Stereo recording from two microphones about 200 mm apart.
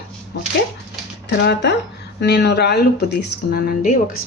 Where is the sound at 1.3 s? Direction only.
60° left (ahead or behind).